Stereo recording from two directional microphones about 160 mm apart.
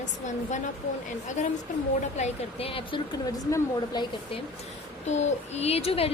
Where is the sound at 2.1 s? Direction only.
40° left (ahead or behind).